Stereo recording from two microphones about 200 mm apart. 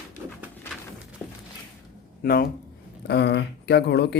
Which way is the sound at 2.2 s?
50° left (ahead or behind).